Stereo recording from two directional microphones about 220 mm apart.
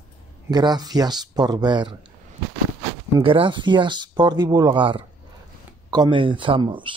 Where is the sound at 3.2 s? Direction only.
25° right (ahead or behind).